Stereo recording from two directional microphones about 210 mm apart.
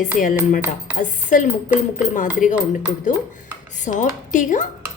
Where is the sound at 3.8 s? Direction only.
35° left (ahead or behind).